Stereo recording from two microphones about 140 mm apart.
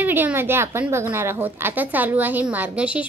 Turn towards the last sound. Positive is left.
turn(degrees=-10)  # may be behind; listen again after turning